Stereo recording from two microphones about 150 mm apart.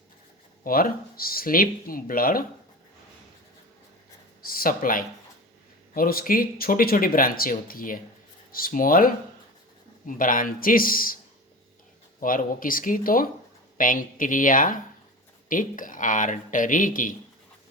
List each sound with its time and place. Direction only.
0.6 s speech: 70° left (ahead or behind)
4.4 s speech: 75° left (ahead or behind)
12.2 s speech: 70° left (ahead or behind)